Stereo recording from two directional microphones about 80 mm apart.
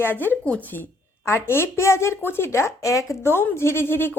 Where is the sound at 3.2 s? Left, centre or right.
Left.